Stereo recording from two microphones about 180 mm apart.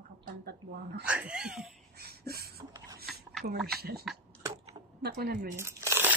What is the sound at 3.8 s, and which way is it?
Speech, 60° right (ahead or behind).